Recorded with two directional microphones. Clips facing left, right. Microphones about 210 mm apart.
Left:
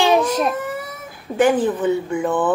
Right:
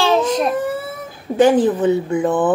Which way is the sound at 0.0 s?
15° left (ahead or behind).